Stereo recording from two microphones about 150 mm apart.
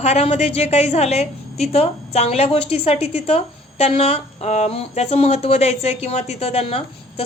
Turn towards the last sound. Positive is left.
turn(degrees=40)  # may be behind; listen again after turning